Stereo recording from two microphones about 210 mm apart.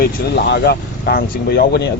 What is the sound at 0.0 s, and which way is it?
A man's voice, 50° left (ahead or behind).